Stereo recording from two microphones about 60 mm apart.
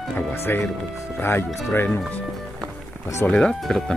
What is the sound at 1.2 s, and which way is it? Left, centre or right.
Speech, left.